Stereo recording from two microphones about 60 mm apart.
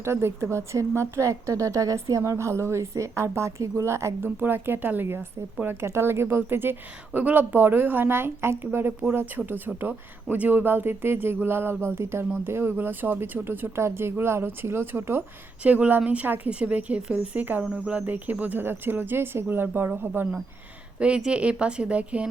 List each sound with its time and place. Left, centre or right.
0.0 s speech: right
4.4 s a woman's voice: right
9.5 s a woman's voice: right
15.6 s speech: right
16.5 s a woman's voice: right
21.0 s speech: centre